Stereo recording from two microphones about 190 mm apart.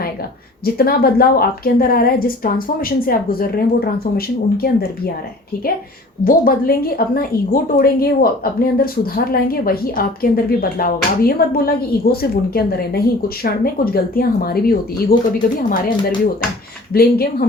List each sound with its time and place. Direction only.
0.6 s a woman's voice: 50° left (ahead or behind)
6.2 s a woman's voice: 50° left (ahead or behind)
16.9 s a woman's voice: 50° left (ahead or behind)